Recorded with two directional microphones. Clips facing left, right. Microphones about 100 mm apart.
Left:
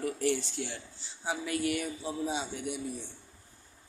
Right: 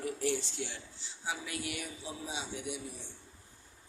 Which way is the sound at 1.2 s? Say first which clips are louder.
Left 7 dB; 45° left (ahead or behind).